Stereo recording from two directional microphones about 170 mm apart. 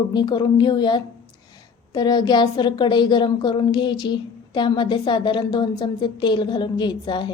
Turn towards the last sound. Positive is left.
turn(degrees=25)  # may be behind; listen again after turning